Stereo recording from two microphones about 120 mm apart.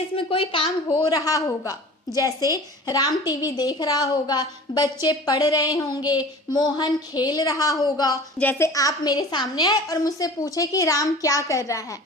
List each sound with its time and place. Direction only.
0.1 s speech: 50° left (ahead or behind)
0.9 s a woman's voice: 30° left (ahead or behind)
8.4 s a woman's voice: 20° left (ahead or behind)